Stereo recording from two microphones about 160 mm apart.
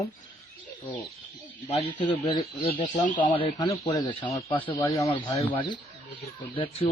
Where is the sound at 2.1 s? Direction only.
25° left (ahead or behind).